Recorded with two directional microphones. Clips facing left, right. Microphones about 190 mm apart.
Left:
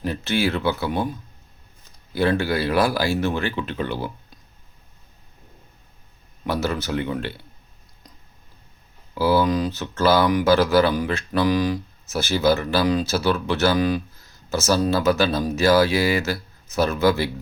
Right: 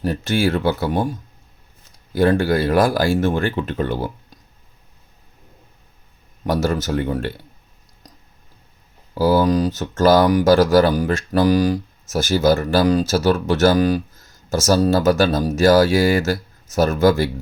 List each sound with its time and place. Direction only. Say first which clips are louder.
0.0 s speech: right 3 dB; 45° right (ahead or behind)
2.1 s speech: right 5 dB; 50° right (ahead or behind)
6.4 s speech: right 4 dB; 45° right (ahead or behind)
9.1 s speech: right 3 dB; 40° right (ahead or behind)